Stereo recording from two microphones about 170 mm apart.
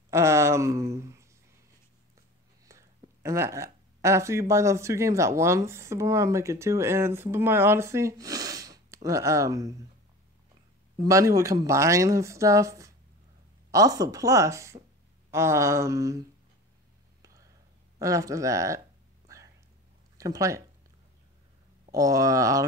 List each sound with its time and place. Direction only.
0.1 s a sound: 15° right (ahead or behind)
2.6 s speech: 20° right (ahead or behind)
11.0 s speech: 20° right (ahead or behind)
15.3 s a sound: 15° right (ahead or behind)
17.2 s whispering: 20° right (ahead or behind)
17.9 s speech: 20° right (ahead or behind)
19.2 s whispering: 20° right (ahead or behind)
20.2 s speech: 20° right (ahead or behind)
21.9 s speech: 20° right (ahead or behind)